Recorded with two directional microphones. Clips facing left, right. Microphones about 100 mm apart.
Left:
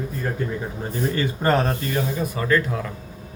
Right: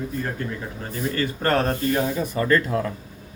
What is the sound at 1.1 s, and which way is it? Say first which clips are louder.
Speech: left 1 dB; 15° left (ahead or behind).